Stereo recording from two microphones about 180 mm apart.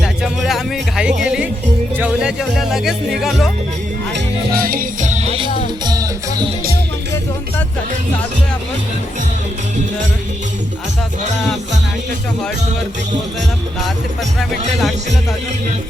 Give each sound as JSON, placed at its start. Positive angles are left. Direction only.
{"t": 0.0, "sound": "music", "side_deg": 0}
{"t": 2.0, "sound": "speech", "side_deg": -5}
{"t": 4.1, "sound": "music", "side_deg": -55}
{"t": 5.5, "sound": "music", "side_deg": 35}
{"t": 5.8, "sound": "music", "side_deg": -20}
{"t": 14.3, "sound": "speech", "side_deg": 0}